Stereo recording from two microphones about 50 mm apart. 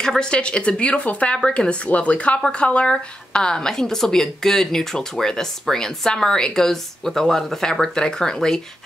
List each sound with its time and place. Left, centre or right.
0.0 s a woman's voice: centre